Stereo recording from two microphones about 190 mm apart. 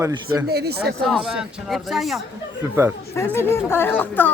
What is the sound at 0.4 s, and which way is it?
Speech, 55° right (ahead or behind).